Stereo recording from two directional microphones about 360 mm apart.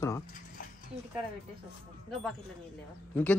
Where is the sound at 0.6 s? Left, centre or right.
Left.